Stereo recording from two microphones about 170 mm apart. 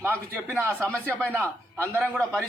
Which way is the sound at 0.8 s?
10° left (ahead or behind).